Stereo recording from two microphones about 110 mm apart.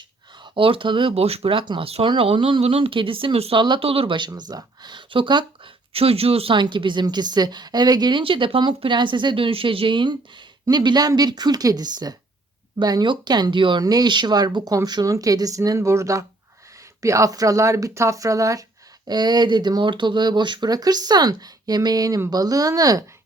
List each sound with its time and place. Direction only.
0.4 s speech: 50° right (ahead or behind)
4.3 s speech: 35° right (ahead or behind); by 6.6 s 60° right (ahead or behind)
6.6 s a woman's voice: 45° right (ahead or behind)
13.8 s a woman's voice: 40° right (ahead or behind)